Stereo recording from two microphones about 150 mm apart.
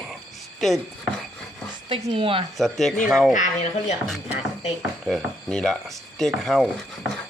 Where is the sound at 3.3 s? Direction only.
55° left (ahead or behind).